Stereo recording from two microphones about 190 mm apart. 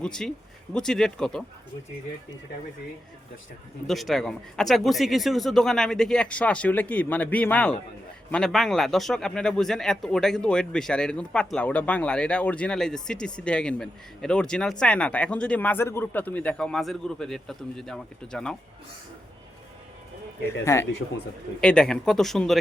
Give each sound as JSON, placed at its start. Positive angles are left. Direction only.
{"t": 0.0, "sound": "speech", "side_deg": 5}
{"t": 3.8, "sound": "speech", "side_deg": 0}
{"t": 20.7, "sound": "speech", "side_deg": 15}